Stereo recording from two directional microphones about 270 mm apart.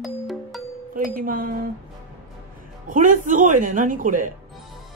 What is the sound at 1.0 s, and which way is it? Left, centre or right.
Speech, right.